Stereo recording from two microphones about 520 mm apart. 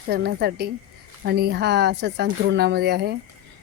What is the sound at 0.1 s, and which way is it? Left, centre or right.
A woman's voice, centre.